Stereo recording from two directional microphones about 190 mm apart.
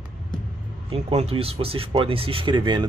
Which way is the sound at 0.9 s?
35° right (ahead or behind).